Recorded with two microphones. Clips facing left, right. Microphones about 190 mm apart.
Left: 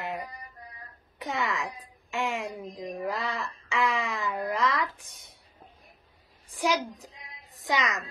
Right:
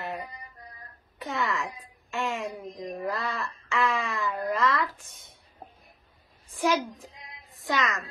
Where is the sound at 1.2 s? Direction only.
15° left (ahead or behind).